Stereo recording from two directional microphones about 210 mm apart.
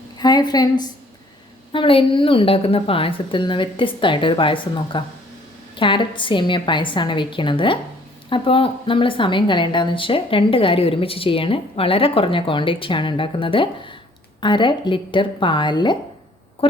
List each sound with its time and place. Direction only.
0.2 s a woman's voice: 20° left (ahead or behind)